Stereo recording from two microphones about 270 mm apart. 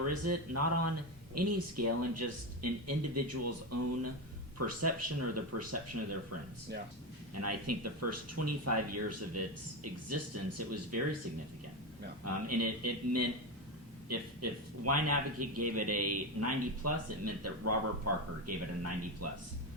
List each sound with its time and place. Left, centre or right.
0.1 s a man's voice: right
7.4 s a man's voice: right
12.2 s a man's voice: right